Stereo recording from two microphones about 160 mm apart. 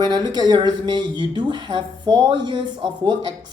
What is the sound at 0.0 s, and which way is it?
Speech, 25° right (ahead or behind).